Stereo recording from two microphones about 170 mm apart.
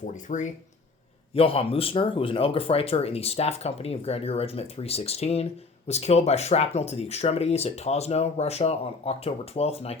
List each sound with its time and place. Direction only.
0.1 s speech: 45° left (ahead or behind)
1.3 s speech: 35° left (ahead or behind)